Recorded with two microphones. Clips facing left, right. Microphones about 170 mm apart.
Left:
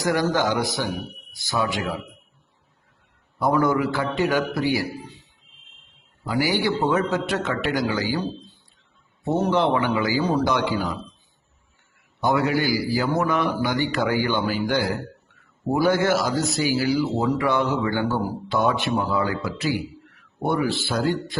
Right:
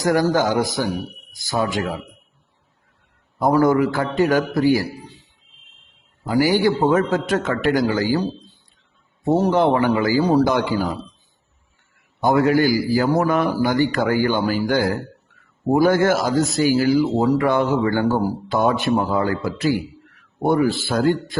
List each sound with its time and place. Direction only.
0.0 s speech: 45° right (ahead or behind)
3.3 s speech: 45° right (ahead or behind)
6.2 s speech: 45° right (ahead or behind)
12.2 s speech: 45° right (ahead or behind)